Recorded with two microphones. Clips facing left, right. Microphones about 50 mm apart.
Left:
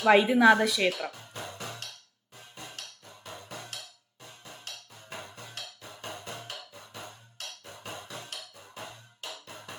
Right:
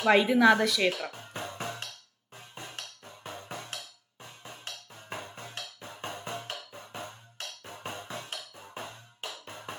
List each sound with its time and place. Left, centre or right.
0.0 s a woman's voice: centre
1.2 s music: right